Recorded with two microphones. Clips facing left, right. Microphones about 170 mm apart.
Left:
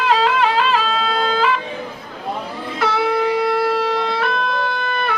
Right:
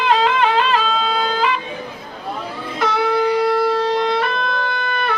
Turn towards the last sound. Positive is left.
turn(degrees=5)  # may be behind; listen again after turning